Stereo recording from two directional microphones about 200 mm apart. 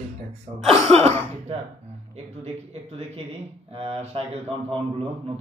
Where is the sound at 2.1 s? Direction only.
30° right (ahead or behind).